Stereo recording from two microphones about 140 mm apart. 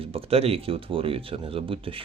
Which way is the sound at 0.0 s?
45° right (ahead or behind).